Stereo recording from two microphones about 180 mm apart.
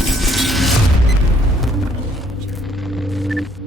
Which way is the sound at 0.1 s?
Centre (ahead or behind).